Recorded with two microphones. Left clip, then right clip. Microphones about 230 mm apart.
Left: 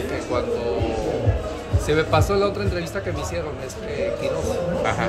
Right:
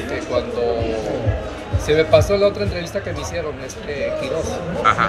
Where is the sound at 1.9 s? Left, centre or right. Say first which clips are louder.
Right 6 dB; centre.